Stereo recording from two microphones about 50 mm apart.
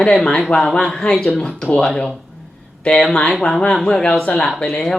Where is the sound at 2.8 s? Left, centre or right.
Centre.